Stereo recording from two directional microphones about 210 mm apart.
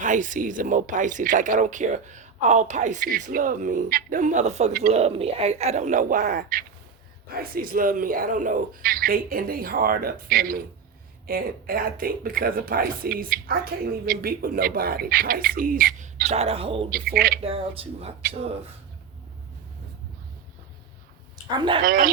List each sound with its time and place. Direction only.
0.0 s speech: 35° right (ahead or behind)
16.9 s speech: 45° right (ahead or behind)
17.4 s speech: 25° right (ahead or behind)
21.5 s speech: 20° right (ahead or behind)
21.8 s speech: 45° right (ahead or behind)